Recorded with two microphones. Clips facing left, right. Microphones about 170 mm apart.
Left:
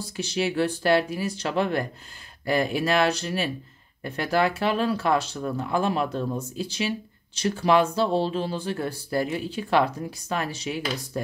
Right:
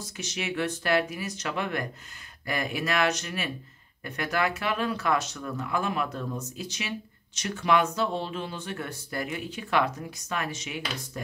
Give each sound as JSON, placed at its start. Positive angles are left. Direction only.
{"t": 0.0, "sound": "speech", "side_deg": 30}